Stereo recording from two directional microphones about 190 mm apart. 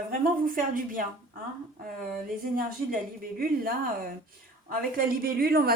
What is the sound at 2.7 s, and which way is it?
Speech, 50° right (ahead or behind).